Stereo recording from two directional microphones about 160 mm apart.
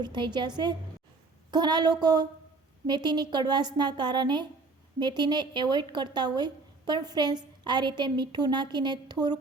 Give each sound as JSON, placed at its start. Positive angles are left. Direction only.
{"t": 0.0, "sound": "speech", "side_deg": -30}